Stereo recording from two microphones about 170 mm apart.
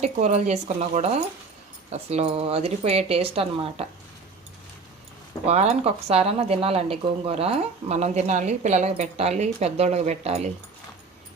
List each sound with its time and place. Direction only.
0.0 s speech: 40° right (ahead or behind)
5.5 s speech: 40° right (ahead or behind)